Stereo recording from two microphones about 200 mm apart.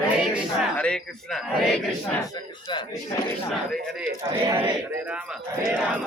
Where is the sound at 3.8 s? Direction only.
5° right (ahead or behind).